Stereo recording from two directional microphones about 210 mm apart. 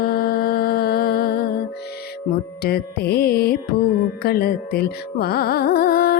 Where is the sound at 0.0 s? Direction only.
45° left (ahead or behind).